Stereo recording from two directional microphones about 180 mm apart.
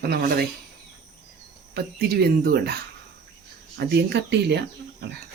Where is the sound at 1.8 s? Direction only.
60° right (ahead or behind).